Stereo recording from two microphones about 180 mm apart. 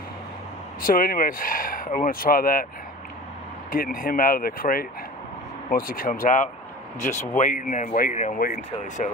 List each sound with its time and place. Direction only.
0.8 s speech: 50° left (ahead or behind)
3.7 s speech: 50° left (ahead or behind)